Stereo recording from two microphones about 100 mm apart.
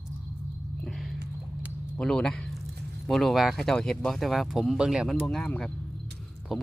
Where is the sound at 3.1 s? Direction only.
Centre (ahead or behind).